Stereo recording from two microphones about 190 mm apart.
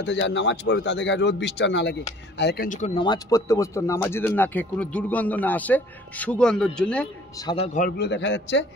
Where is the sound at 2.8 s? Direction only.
25° left (ahead or behind); by 7.1 s 5° left (ahead or behind).